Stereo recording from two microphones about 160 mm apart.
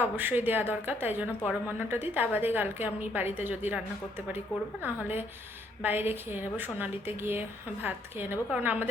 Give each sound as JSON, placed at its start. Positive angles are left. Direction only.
{"t": 0.0, "sound": "a woman's voice", "side_deg": -10}
{"t": 4.8, "sound": "a woman's voice", "side_deg": -10}